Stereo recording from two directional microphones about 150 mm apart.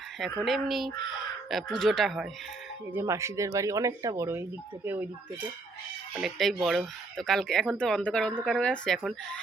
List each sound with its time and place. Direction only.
0.4 s speech: centre (ahead or behind)
2.9 s speech: 20° right (ahead or behind)
6.1 s speech: centre (ahead or behind)